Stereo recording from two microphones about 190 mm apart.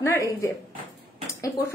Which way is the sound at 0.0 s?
15° left (ahead or behind).